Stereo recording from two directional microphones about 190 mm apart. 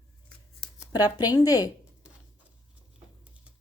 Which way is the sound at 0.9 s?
20° left (ahead or behind).